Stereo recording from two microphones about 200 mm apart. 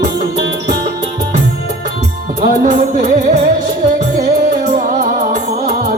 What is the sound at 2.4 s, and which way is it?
Music, 40° right (ahead or behind).